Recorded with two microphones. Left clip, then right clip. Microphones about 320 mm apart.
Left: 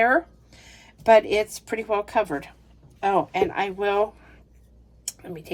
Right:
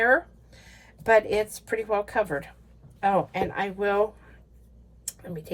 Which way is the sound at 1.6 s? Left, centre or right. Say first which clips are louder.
Left 1 dB; centre.